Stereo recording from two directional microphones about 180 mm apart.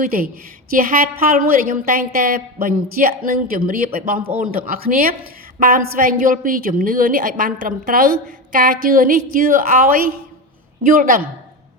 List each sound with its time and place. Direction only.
0.0 s a woman's voice: 55° right (ahead or behind)